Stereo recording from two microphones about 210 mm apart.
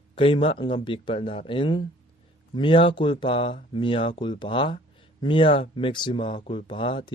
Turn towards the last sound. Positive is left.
turn(degrees=25)  # may be behind; listen again after turning